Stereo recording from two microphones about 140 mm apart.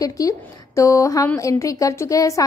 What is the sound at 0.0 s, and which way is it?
A woman's voice, 25° left (ahead or behind).